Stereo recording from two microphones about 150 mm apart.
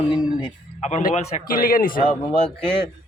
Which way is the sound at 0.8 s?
50° left (ahead or behind).